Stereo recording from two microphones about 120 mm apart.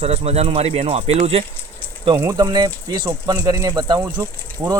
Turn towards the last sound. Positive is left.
turn(degrees=-35)  # may be behind; listen again after turning